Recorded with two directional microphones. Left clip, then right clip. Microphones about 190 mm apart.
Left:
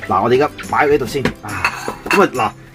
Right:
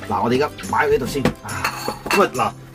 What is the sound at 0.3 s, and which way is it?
Speech, 50° left (ahead or behind).